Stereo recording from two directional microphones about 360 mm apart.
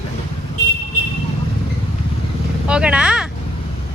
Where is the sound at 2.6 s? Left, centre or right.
Centre.